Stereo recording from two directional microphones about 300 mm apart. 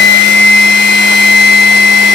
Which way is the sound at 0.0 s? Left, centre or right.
Left.